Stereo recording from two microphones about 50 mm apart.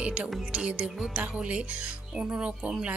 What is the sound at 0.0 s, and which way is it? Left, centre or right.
Speech, right.